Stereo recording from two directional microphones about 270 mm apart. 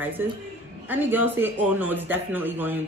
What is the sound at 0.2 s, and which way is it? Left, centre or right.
A man's voice, centre.